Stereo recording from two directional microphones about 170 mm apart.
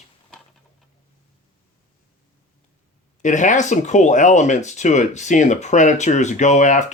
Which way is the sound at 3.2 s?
45° left (ahead or behind).